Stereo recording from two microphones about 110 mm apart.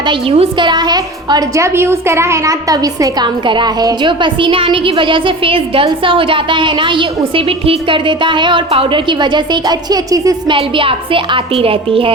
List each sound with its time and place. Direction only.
0.0 s a woman's voice: 55° right (ahead or behind); by 10.5 s 35° right (ahead or behind)
10.5 s a woman's voice: 55° right (ahead or behind)